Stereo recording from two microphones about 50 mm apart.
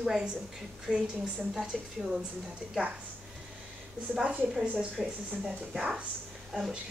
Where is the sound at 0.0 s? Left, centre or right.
Centre.